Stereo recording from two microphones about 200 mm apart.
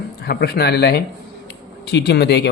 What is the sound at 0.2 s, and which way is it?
Speech, 55° left (ahead or behind).